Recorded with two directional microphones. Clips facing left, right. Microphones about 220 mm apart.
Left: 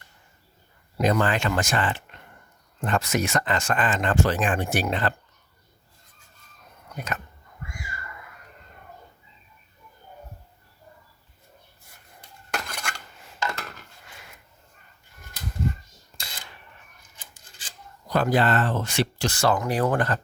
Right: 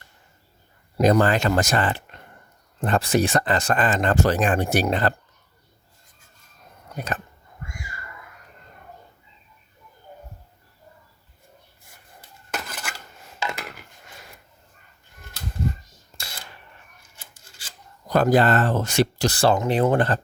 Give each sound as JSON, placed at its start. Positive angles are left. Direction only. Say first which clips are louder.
{"t": 0.9, "sound": "speech", "louder": "right 5 dB", "side_deg": -40}
{"t": 6.9, "sound": "speech", "louder": "right 3 dB", "side_deg": -35}
{"t": 12.5, "sound": "dishes", "louder": "even", "side_deg": -5}
{"t": 13.4, "sound": "dishes", "louder": "right 1 dB", "side_deg": -15}
{"t": 18.1, "sound": "speech", "louder": "right 4 dB", "side_deg": -45}